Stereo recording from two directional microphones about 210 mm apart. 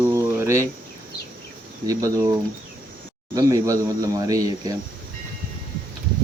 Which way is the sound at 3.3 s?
15° right (ahead or behind).